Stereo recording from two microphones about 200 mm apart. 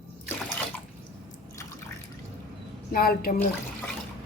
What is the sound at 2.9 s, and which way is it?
Speech, 45° left (ahead or behind).